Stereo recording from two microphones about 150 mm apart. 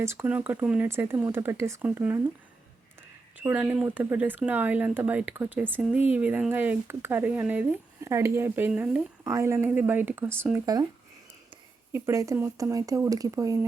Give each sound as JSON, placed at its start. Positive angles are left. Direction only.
{"t": 0.0, "sound": "speech", "side_deg": -15}
{"t": 3.3, "sound": "speech", "side_deg": -10}
{"t": 11.9, "sound": "speech", "side_deg": -15}